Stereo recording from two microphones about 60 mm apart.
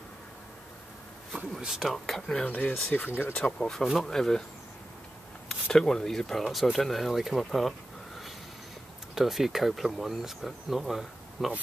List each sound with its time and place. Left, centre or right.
1.6 s speech: centre
2.4 s speech: left
3.8 s speech: centre
4.1 s speech: centre
5.5 s speech: centre
9.1 s speech: centre